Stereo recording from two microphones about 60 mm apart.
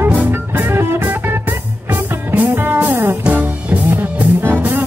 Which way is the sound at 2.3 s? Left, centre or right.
Right.